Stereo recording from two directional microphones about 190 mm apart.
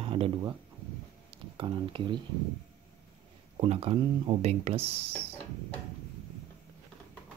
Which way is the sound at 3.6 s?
30° right (ahead or behind).